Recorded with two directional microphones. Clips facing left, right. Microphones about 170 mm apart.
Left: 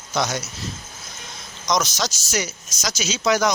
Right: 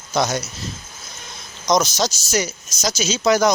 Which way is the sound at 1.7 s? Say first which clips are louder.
Right 4 dB; 30° right (ahead or behind).